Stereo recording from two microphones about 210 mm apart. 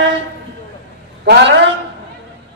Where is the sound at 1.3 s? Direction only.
55° right (ahead or behind).